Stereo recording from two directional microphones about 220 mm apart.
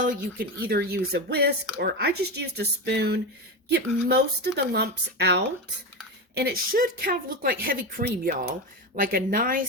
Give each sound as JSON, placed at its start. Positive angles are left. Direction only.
{"t": 0.0, "sound": "speech", "side_deg": -40}